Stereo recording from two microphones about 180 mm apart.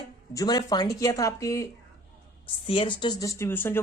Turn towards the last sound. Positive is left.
turn(degrees=15)  # may be behind; listen again after turning